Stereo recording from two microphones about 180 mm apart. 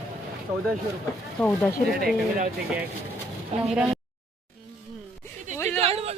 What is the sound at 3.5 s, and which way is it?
Speech, 40° right (ahead or behind).